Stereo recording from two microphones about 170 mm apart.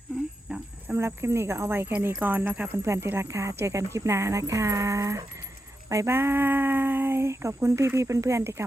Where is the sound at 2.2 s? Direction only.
10° right (ahead or behind).